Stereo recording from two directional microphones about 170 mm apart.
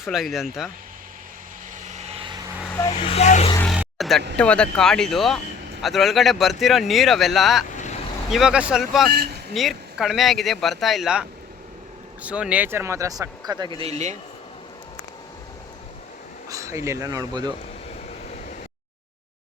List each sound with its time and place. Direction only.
0.0 s speech: centre (ahead or behind)
1.8 s vehicle: 40° right (ahead or behind)
2.9 s speech: 35° left (ahead or behind)
3.7 s vehicle: centre (ahead or behind)
4.4 s speech: 5° left (ahead or behind); by 14.2 s 40° right (ahead or behind)
16.5 s speech: 20° right (ahead or behind)